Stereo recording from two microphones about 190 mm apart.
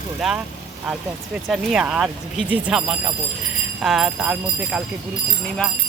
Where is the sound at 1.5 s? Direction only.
5° right (ahead or behind).